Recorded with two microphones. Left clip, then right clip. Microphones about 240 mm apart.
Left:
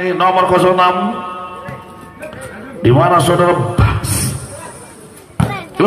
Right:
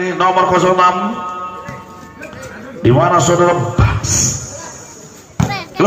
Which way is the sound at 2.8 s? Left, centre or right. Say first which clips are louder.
Left 1 dB; left.